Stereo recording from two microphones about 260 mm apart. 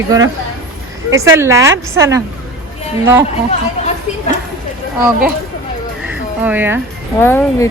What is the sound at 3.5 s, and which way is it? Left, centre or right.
Speech, left.